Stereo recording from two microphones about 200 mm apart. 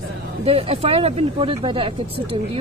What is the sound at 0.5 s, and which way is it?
Speech, 30° right (ahead or behind).